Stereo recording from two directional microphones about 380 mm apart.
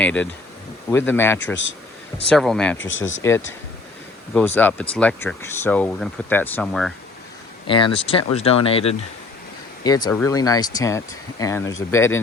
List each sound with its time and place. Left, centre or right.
0.0 s speech: centre
2.7 s speech: left
4.4 s speech: centre
7.7 s speech: centre